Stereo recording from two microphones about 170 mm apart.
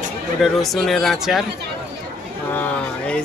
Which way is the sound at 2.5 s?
10° left (ahead or behind).